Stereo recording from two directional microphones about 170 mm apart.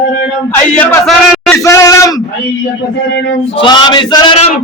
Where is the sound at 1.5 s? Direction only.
15° left (ahead or behind).